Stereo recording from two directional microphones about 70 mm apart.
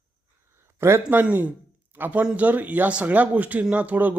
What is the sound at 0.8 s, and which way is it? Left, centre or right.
Speech, right.